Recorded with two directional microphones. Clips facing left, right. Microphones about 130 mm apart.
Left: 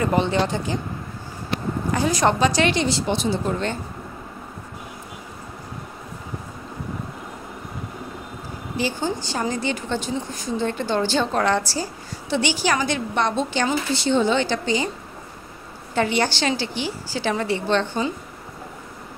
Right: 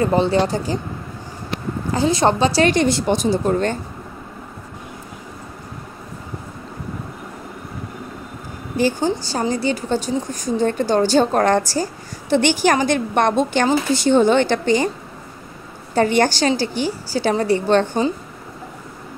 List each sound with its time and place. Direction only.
0.0 s a woman's voice: 35° right (ahead or behind)
1.9 s a woman's voice: 30° right (ahead or behind)
2.6 s a woman's voice: 50° right (ahead or behind)
8.7 s a woman's voice: 45° right (ahead or behind)
15.9 s a woman's voice: 45° right (ahead or behind)